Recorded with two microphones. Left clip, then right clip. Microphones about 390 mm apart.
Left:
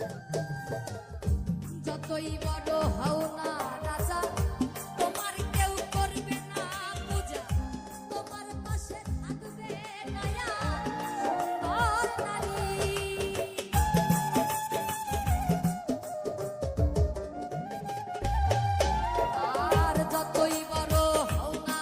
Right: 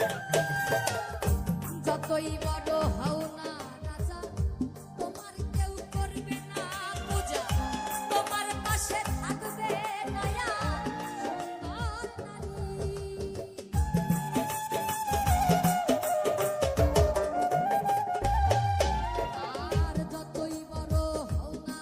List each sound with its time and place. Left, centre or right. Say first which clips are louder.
0.0 s music: right 8 dB; right
1.9 s music: right 6 dB; centre
2.6 s music: left 1 dB; centre
4.1 s music: left 9 dB; left
5.5 s music: left 8 dB; centre
8.1 s music: right 8 dB; right
10.2 s music: left 1 dB; centre
12.8 s music: left 5 dB; left
13.7 s music: left 6 dB; centre